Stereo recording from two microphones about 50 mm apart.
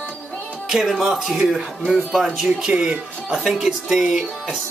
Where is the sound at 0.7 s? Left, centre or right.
Centre.